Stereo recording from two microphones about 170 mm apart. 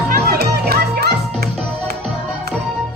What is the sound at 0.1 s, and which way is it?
Music, 70° right (ahead or behind).